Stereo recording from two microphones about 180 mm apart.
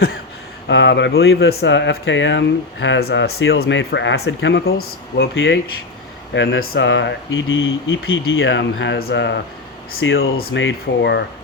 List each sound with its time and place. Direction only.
0.7 s speech: 80° left
2.8 s speech: 75° left (ahead or behind)
9.9 s speech: 90° left